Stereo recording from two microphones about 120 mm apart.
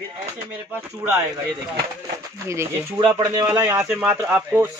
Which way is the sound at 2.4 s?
20° right (ahead or behind).